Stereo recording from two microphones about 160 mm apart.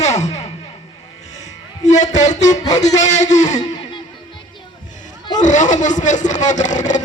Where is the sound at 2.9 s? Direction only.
45° left (ahead or behind).